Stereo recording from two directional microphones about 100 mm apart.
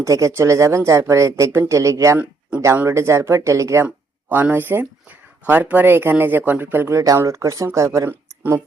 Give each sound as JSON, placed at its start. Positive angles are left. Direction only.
{"t": 0.0, "sound": "speech", "side_deg": -30}
{"t": 3.8, "sound": "speech", "side_deg": -20}